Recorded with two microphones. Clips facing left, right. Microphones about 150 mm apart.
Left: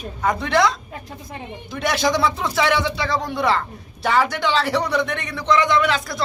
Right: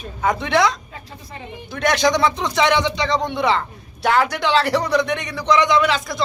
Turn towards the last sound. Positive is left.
turn(degrees=0)  # may be behind; listen again after turning